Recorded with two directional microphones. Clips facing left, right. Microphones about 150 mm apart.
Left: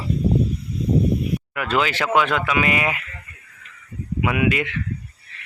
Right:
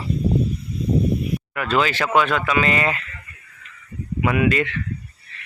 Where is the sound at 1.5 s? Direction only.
15° left (ahead or behind).